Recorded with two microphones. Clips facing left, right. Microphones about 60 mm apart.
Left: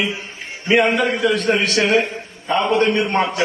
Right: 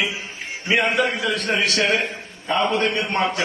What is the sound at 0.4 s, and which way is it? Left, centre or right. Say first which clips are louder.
A man's voice: left 5 dB; centre.